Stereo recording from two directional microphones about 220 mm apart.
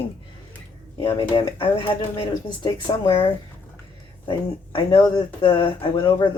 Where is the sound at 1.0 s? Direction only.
20° left (ahead or behind).